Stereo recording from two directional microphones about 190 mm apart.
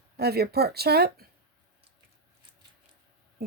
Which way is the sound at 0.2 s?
55° right (ahead or behind).